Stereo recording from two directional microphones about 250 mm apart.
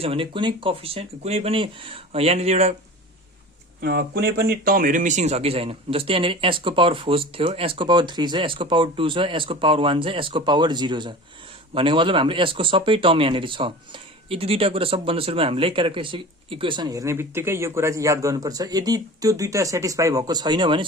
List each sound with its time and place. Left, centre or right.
0.0 s speech: right
3.8 s speech: right; by 20.8 s centre